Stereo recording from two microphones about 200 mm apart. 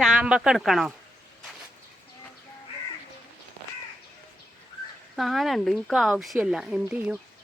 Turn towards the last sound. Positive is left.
turn(degrees=-5)  # may be behind; listen again after turning